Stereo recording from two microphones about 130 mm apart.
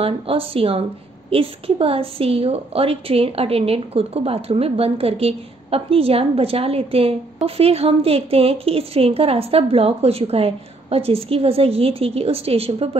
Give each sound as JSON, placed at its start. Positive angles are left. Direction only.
{"t": 0.0, "sound": "a woman's voice", "side_deg": -45}